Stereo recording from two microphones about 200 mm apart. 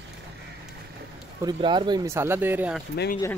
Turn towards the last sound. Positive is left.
turn(degrees=50)  # may be behind; listen again after turning